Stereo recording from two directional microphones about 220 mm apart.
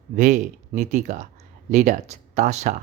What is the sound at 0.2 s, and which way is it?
Speech, 35° right (ahead or behind).